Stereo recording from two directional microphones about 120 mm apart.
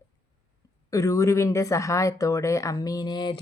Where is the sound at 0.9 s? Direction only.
25° left (ahead or behind).